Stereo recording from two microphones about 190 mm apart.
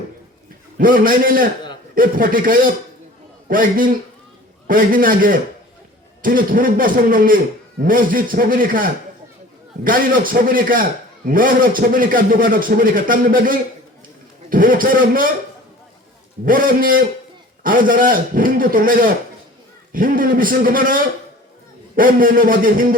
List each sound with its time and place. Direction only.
0.8 s a man's voice: 45° right (ahead or behind)
16.5 s a man's voice: 45° right (ahead or behind)